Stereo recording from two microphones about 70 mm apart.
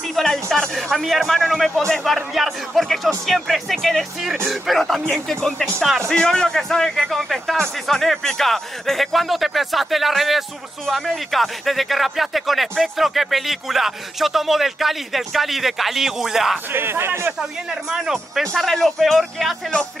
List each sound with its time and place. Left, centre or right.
0.1 s a man's voice: centre
16.7 s speech: right
17.4 s speech: centre